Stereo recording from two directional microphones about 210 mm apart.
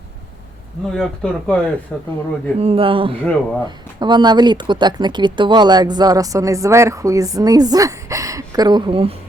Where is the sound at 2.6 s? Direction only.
30° right (ahead or behind).